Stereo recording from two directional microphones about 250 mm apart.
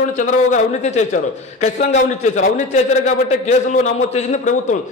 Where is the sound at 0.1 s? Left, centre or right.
Left.